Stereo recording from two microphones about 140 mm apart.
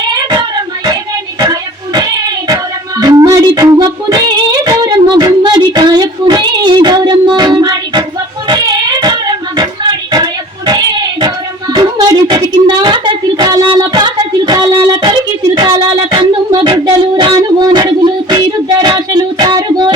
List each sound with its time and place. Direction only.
0.1 s child singing: 30° right (ahead or behind)
3.0 s music: 25° right (ahead or behind)
4.6 s child singing: 30° right (ahead or behind)
10.7 s a sound: 30° right (ahead or behind)
12.8 s child singing: 35° right (ahead or behind)